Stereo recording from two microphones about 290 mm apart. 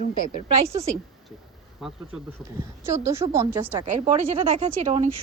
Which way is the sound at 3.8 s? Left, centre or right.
Right.